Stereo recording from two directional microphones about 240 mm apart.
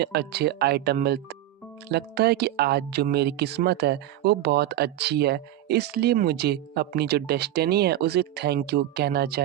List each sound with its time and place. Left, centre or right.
0.0 s speech: right